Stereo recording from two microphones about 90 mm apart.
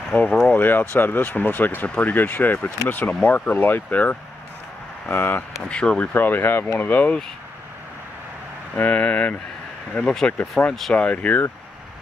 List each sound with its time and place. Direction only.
0.1 s speech: 15° left (ahead or behind)
5.7 s speech: 10° left (ahead or behind)
8.7 s speech: 15° left (ahead or behind)